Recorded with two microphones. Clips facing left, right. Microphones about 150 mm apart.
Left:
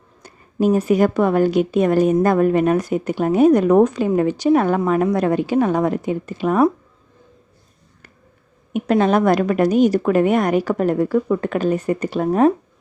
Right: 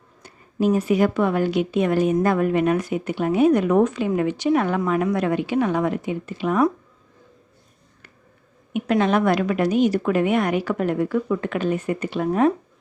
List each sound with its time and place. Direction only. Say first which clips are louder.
0.2 s a woman's voice: left 3 dB; 45° left (ahead or behind)
8.7 s a woman's voice: left 3 dB; 40° left (ahead or behind)